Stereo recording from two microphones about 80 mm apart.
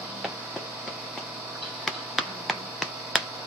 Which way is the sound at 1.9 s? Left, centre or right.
Centre.